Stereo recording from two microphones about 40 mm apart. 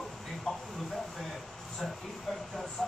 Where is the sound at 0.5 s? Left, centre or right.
Centre.